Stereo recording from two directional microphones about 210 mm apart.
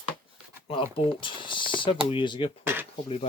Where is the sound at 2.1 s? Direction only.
25° left (ahead or behind).